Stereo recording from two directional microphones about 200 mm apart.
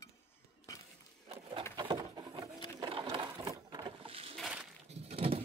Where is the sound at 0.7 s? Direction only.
15° left (ahead or behind).